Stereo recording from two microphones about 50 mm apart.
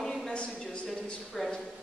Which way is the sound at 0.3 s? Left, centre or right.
Left.